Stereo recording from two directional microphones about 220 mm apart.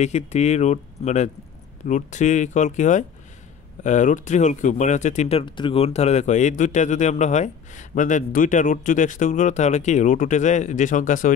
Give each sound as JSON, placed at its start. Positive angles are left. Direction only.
{"t": 0.0, "sound": "speech", "side_deg": 30}